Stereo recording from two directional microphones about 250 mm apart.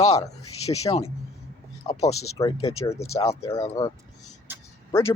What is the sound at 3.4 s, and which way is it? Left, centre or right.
Speech, centre.